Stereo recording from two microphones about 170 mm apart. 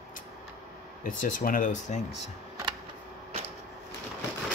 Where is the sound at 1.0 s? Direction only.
55° left (ahead or behind).